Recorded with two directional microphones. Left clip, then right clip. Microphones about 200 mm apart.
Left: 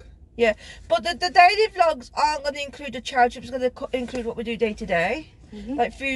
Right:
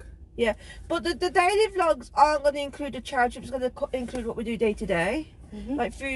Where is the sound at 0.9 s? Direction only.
20° left (ahead or behind).